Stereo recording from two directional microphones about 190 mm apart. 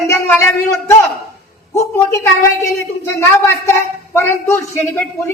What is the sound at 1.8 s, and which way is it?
Speech, 15° left (ahead or behind).